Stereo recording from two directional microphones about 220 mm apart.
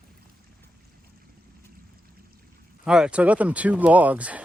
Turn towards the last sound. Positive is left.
turn(degrees=-5)  # may be behind; listen again after turning